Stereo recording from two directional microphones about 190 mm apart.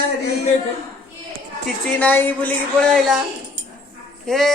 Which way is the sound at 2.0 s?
10° left (ahead or behind).